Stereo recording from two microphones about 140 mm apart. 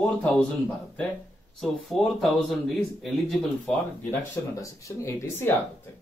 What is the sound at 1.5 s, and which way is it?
Speech, centre (ahead or behind).